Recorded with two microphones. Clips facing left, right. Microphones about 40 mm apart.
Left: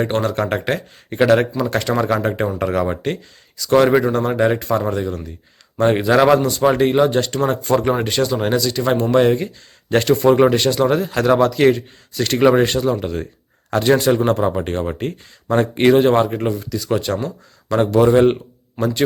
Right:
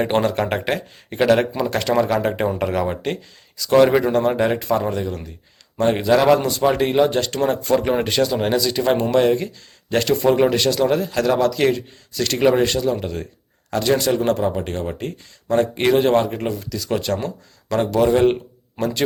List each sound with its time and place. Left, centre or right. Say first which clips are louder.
0.0 s speech: even; centre
6.4 s speech: left 3 dB; centre
13.7 s speech: left 4 dB; left
13.9 s speech: left 3 dB; centre
14.4 s speech: left 3 dB; left; by 18.3 s centre